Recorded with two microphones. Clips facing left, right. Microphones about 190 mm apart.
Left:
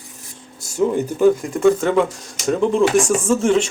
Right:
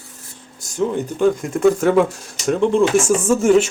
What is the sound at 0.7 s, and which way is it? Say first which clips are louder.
Speech: left 2 dB; 5° left (ahead or behind).